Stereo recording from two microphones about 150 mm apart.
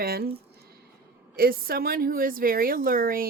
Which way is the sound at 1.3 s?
80° right.